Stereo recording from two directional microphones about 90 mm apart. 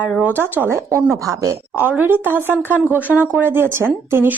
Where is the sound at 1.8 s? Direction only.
20° right (ahead or behind).